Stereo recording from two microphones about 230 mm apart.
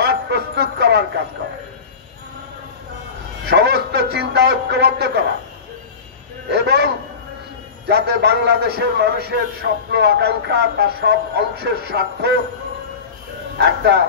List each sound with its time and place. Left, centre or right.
0.0 s music: right
3.4 s a sound: right
4.1 s speech: right
6.5 s speech: right
7.9 s speech: right
13.6 s speech: right